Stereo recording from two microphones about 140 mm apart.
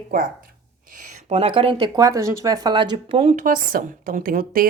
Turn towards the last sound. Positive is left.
turn(degrees=-90)